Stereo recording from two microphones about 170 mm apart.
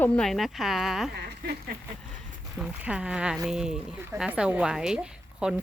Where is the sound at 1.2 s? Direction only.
70° right (ahead or behind).